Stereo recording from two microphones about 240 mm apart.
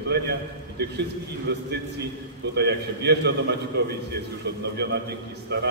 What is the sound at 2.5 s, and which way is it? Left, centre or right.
A man's voice, right.